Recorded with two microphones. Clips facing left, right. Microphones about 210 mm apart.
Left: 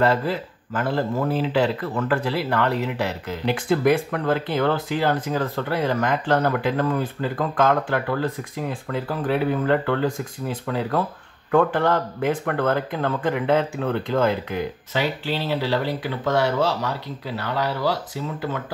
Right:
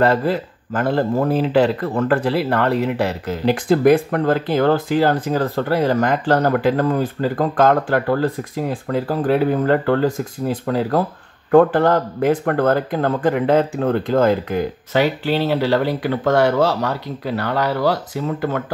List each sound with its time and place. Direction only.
0.0 s speech: 45° right (ahead or behind)
14.9 s speech: 60° right (ahead or behind)